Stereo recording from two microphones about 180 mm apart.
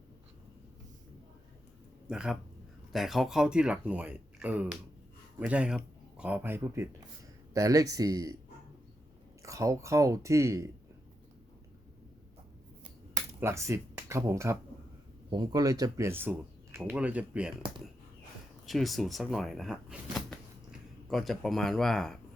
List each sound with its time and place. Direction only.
2.0 s speech: 5° right (ahead or behind); by 8.4 s 20° right (ahead or behind)
9.4 s speech: 15° right (ahead or behind)
13.4 s speech: 15° right (ahead or behind)
18.6 s speech: centre (ahead or behind)